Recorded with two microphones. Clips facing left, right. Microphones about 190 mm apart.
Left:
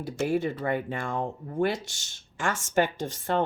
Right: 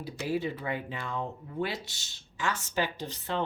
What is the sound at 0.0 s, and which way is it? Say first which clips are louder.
Speech: left 5 dB; 50° left (ahead or behind).